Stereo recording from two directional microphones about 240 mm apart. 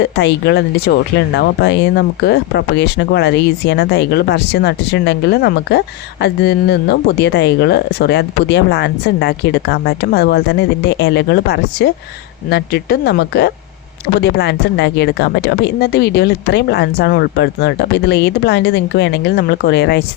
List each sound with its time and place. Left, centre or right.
0.0 s speech: left